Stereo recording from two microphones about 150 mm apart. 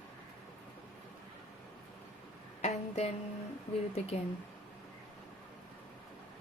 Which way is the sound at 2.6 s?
45° left (ahead or behind).